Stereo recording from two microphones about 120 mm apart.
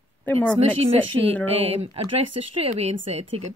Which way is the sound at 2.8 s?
60° right (ahead or behind).